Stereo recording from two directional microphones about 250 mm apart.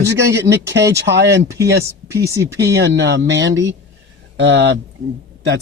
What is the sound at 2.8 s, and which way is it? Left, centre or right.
A man's voice, right.